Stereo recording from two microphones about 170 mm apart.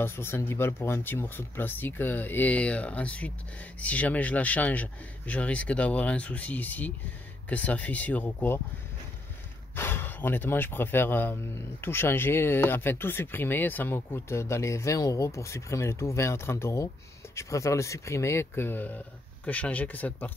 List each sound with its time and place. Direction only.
0.0 s speech: 15° left (ahead or behind)
9.8 s speech: 15° left (ahead or behind)